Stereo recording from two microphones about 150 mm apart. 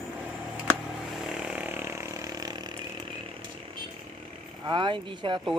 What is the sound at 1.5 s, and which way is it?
Chainsaw, 10° right (ahead or behind).